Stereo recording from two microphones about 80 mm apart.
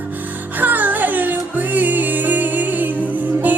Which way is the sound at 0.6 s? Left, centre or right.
Right.